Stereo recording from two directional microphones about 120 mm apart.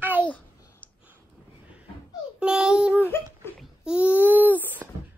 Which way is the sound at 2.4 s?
5° right (ahead or behind).